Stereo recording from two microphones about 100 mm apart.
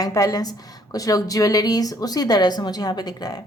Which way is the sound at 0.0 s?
35° left (ahead or behind).